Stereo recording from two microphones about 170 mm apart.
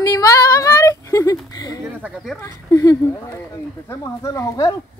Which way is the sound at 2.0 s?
10° right (ahead or behind).